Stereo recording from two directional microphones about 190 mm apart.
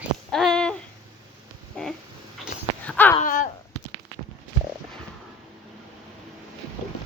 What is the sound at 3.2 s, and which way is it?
Dog, 45° left (ahead or behind).